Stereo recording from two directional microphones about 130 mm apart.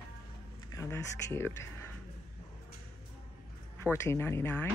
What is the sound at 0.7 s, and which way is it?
Speech, 20° left (ahead or behind).